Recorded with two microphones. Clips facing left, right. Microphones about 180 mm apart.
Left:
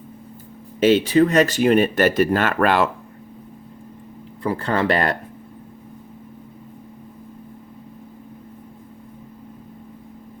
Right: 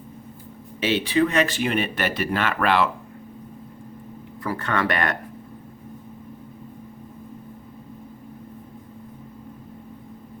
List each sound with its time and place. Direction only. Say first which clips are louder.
0.8 s speech: left 6 dB; 45° left (ahead or behind)
4.4 s speech: left 4 dB; 30° left (ahead or behind)